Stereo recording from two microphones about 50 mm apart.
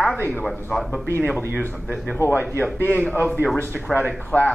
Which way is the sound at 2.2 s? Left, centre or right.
Left.